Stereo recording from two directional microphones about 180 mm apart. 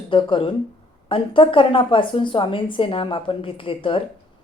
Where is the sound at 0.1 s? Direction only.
30° left (ahead or behind).